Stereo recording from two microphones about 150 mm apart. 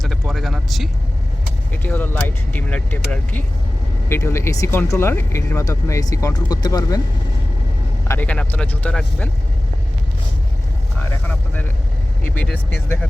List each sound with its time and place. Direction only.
0.0 s speech: centre (ahead or behind)
1.8 s speech: 15° left (ahead or behind)
8.0 s speech: 15° left (ahead or behind)
12.3 s speech: 10° left (ahead or behind)